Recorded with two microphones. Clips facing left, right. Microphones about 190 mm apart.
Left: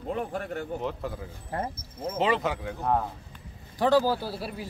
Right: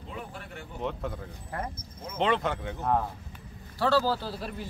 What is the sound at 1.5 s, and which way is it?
Speech, 30° left (ahead or behind).